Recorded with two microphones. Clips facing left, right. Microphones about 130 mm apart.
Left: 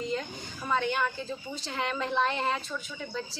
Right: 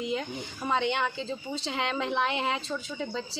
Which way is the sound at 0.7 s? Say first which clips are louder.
Right 1 dB; 20° right (ahead or behind).